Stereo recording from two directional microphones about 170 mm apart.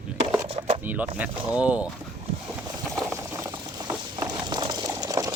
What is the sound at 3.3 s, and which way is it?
Boiling, 15° right (ahead or behind).